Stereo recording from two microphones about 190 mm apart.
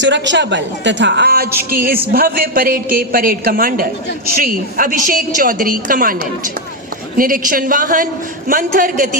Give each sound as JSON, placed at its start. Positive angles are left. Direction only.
{"t": 0.0, "sound": "a woman's voice", "side_deg": -70}
{"t": 7.2, "sound": "a woman's voice", "side_deg": -50}